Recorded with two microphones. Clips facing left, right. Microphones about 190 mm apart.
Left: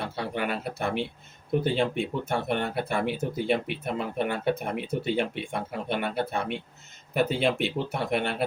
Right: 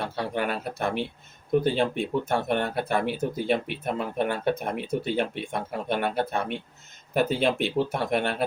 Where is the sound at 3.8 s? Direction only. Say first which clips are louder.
Right 2 dB; 45° right (ahead or behind).